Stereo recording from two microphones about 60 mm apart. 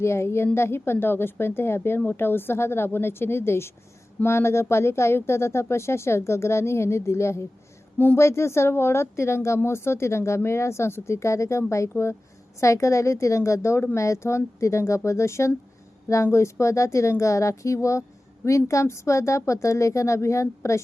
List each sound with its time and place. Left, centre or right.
0.0 s a woman's voice: left
7.9 s a woman's voice: left
8.2 s speech: left